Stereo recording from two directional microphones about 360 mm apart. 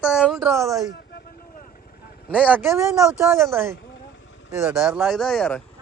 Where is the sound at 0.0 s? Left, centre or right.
Centre.